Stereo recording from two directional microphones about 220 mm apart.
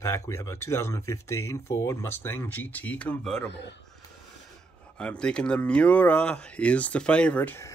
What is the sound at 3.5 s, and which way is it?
Speech, 50° left (ahead or behind).